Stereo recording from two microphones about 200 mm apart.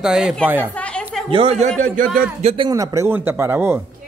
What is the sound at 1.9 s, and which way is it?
Speech, 45° right (ahead or behind).